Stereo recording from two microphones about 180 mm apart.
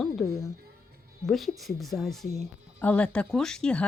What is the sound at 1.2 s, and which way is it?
Speech, centre (ahead or behind).